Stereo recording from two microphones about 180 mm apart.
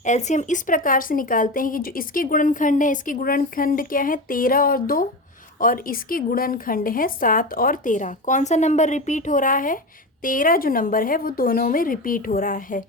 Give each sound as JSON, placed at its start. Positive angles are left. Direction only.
{"t": 0.0, "sound": "speech", "side_deg": 40}